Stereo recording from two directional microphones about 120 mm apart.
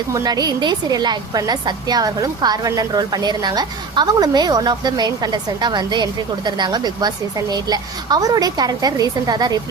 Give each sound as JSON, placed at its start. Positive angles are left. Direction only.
{"t": 0.1, "sound": "a woman's voice", "side_deg": -35}